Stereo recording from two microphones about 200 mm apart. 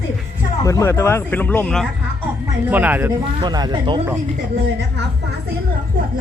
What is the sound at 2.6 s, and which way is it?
Speech, 10° right (ahead or behind).